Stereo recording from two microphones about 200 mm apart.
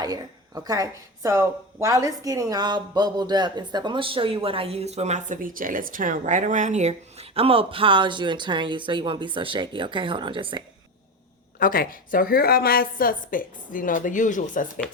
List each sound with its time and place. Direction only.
0.0 s speech: 20° right (ahead or behind)
11.6 s a woman's voice: 45° left (ahead or behind)